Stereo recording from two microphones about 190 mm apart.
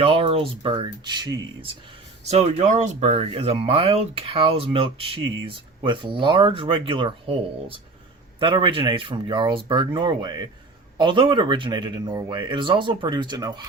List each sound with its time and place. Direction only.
0.0 s speech: 30° right (ahead or behind)
2.3 s speech: 35° right (ahead or behind)
8.4 s speech: 25° right (ahead or behind)